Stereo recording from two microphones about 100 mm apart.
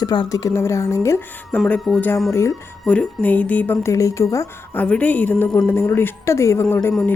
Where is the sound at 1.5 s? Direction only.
10° left (ahead or behind).